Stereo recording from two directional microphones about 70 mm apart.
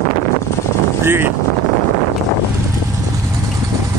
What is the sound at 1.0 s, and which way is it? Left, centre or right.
Speech, right.